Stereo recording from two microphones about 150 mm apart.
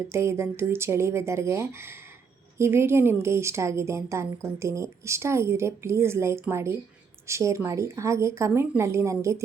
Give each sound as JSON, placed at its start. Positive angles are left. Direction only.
{"t": 0.1, "sound": "a woman's voice", "side_deg": -15}